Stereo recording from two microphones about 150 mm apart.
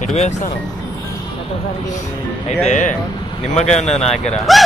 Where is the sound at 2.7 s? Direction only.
55° left (ahead or behind).